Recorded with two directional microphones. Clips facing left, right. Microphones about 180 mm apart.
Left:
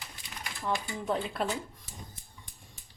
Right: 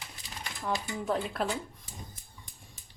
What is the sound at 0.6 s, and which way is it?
Speech, centre (ahead or behind).